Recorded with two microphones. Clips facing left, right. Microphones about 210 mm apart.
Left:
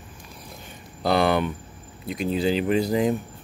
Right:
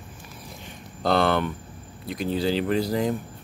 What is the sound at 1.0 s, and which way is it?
Speech, 10° left (ahead or behind).